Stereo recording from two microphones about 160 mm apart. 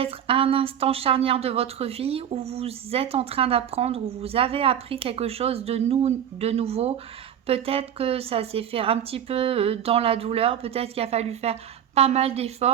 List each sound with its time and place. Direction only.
0.0 s a woman's voice: 35° right (ahead or behind)